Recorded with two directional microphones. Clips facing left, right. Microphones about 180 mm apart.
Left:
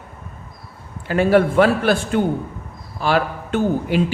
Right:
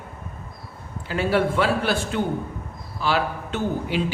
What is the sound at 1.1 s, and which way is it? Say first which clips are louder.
A man's voice: left 6 dB; 50° left (ahead or behind).